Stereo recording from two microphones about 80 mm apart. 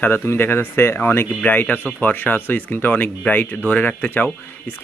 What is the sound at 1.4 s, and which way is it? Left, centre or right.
Speech, centre.